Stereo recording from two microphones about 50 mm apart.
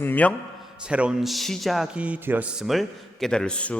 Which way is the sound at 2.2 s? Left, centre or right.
Right.